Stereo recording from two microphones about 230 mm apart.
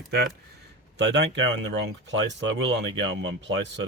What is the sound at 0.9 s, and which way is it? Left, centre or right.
Speech, right.